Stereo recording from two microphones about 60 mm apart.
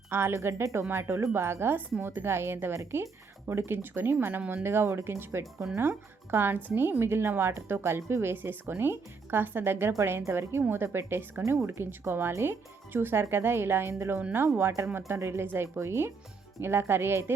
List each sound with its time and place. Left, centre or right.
0.1 s speech: right
5.7 s speech: right
11.4 s speech: right
11.9 s speech: right